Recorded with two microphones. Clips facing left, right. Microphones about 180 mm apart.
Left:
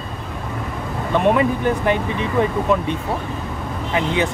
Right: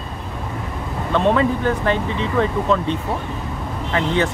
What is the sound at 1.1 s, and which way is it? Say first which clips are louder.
Speech: even; 15° left (ahead or behind).